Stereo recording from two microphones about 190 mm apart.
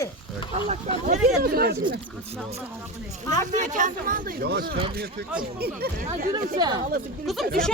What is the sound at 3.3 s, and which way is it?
Speech, 40° right (ahead or behind).